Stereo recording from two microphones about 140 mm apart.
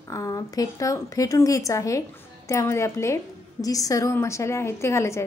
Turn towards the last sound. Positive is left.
turn(degrees=20)  # may be behind; listen again after turning